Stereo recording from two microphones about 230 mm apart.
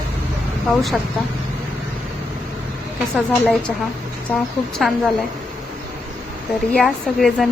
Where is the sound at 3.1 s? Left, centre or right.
Centre.